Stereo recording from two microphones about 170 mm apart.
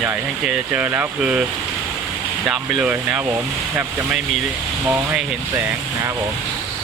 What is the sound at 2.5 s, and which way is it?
Speech, centre (ahead or behind).